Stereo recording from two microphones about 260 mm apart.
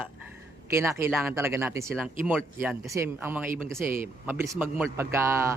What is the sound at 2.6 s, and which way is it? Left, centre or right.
Speech, centre.